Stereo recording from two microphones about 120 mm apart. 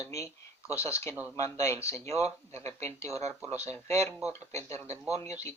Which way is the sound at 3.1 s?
65° right (ahead or behind).